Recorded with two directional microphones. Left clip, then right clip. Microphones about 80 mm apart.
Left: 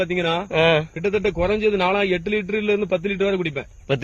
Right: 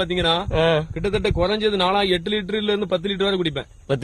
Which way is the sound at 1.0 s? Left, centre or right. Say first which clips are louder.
Left 1 dB; right.